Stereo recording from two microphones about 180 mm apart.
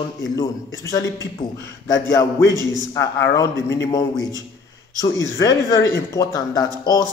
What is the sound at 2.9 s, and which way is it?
Speech, 20° left (ahead or behind).